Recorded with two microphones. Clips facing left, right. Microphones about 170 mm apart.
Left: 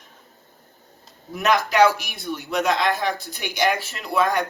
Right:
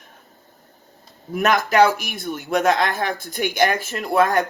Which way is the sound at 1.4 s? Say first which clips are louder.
Right 1 dB; 50° right (ahead or behind).